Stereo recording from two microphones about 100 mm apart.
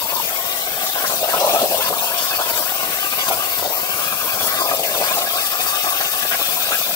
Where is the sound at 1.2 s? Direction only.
30° left (ahead or behind).